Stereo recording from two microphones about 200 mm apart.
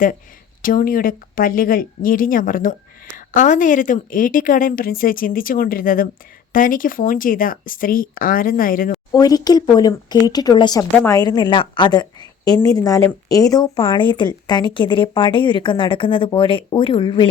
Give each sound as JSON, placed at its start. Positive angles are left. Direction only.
{"t": 0.6, "sound": "a woman's voice", "side_deg": 45}
{"t": 9.1, "sound": "speech", "side_deg": 20}
{"t": 10.9, "sound": "speech", "side_deg": 10}
{"t": 11.2, "sound": "speech", "side_deg": 20}